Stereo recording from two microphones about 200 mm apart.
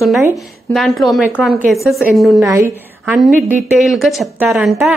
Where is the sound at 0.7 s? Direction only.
Centre (ahead or behind).